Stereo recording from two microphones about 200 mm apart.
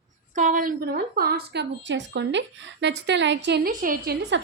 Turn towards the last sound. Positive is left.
turn(degrees=-45)  # may be behind; listen again after turning